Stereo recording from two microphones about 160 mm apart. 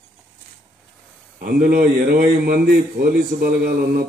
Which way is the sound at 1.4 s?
65° right (ahead or behind).